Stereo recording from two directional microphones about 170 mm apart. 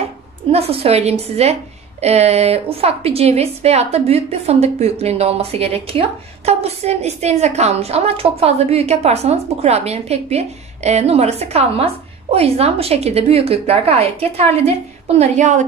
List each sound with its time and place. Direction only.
0.5 s a woman's voice: 35° right (ahead or behind)